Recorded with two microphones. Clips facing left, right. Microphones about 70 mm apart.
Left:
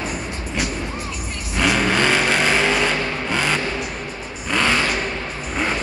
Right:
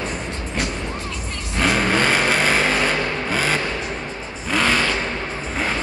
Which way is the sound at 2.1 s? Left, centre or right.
Centre.